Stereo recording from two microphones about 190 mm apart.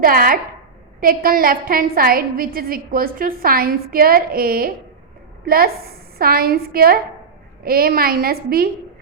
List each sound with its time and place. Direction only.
0.0 s a woman's voice: 50° right (ahead or behind)